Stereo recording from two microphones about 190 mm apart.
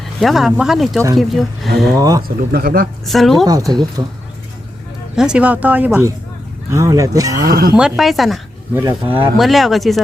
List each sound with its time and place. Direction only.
0.2 s speech: centre (ahead or behind)
2.0 s speech: 20° right (ahead or behind)
2.2 s speech: 50° right (ahead or behind)
3.1 s speech: centre (ahead or behind)
3.4 s speech: 20° right (ahead or behind)
5.1 s speech: 5° right (ahead or behind)
7.4 s speech: 55° right (ahead or behind)
7.8 s speech: centre (ahead or behind)